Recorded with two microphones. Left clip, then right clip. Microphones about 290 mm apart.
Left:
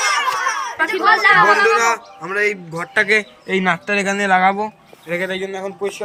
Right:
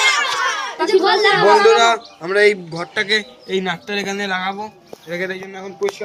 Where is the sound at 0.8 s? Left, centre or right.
Centre.